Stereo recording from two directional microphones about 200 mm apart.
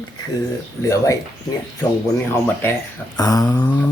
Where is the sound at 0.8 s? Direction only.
15° left (ahead or behind).